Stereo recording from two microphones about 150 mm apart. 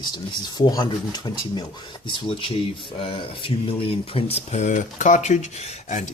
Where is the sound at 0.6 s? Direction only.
30° left (ahead or behind).